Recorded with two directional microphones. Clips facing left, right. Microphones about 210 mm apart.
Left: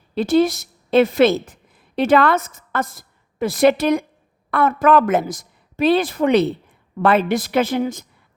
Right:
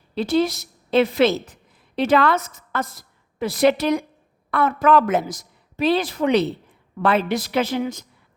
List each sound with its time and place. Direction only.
0.1 s a woman's voice: 50° left (ahead or behind)